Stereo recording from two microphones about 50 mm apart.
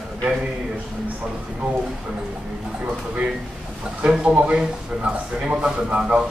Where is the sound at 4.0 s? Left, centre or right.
Centre.